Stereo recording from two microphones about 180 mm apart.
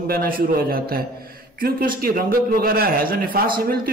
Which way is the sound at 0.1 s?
55° right (ahead or behind).